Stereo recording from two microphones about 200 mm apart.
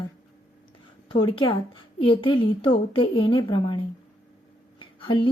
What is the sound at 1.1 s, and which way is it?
A woman's voice, 25° left (ahead or behind).